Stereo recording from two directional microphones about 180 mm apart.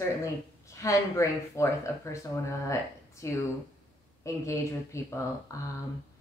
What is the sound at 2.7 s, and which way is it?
A woman's voice, 15° left (ahead or behind).